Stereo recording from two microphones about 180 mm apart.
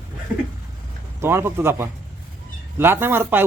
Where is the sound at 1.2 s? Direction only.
15° right (ahead or behind).